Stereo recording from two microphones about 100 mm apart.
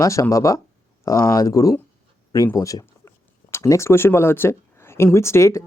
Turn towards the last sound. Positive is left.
turn(degrees=30)  # may be behind; listen again after turning